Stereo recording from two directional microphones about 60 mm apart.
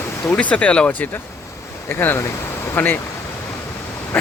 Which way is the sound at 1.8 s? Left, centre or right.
Left.